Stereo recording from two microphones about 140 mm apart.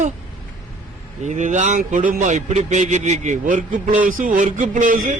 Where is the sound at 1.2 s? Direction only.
60° right (ahead or behind).